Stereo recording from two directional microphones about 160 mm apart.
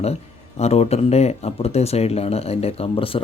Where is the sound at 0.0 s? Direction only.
40° left (ahead or behind).